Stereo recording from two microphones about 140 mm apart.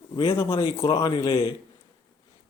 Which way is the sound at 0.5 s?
40° left (ahead or behind).